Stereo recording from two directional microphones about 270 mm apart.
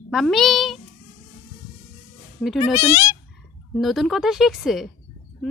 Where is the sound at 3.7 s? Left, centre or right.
Centre.